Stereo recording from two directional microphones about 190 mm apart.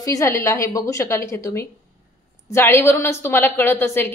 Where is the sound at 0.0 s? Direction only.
15° left (ahead or behind).